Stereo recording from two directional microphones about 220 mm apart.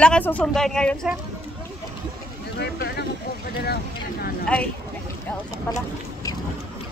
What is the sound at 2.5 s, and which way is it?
Speech, 45° left (ahead or behind).